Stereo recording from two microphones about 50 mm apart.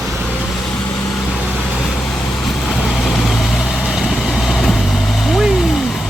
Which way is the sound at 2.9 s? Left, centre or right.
Centre.